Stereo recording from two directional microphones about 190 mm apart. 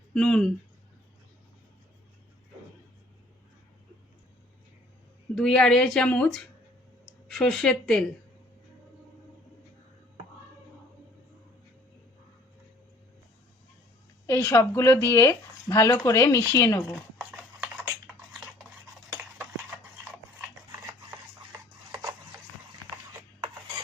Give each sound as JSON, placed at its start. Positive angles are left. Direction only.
{"t": 0.1, "sound": "speech", "side_deg": 5}
{"t": 5.3, "sound": "speech", "side_deg": 5}
{"t": 14.3, "sound": "speech", "side_deg": 15}
{"t": 16.9, "sound": "stir", "side_deg": 0}
{"t": 21.9, "sound": "a sound", "side_deg": -20}